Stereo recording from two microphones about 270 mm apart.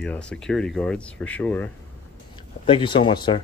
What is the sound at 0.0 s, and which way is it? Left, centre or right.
Speech, centre.